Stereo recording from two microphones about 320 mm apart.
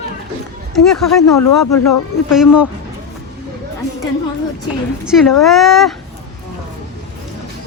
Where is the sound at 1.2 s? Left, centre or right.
Left.